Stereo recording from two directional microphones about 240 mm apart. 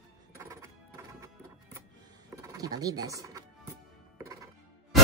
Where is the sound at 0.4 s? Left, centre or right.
Centre.